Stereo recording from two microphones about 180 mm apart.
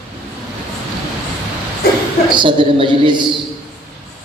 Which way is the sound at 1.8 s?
60° left (ahead or behind).